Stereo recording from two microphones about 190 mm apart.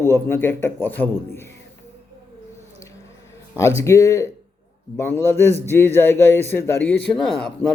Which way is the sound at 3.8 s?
15° left (ahead or behind).